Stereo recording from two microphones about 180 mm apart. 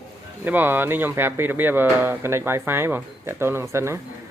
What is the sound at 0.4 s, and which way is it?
Speech, 10° right (ahead or behind).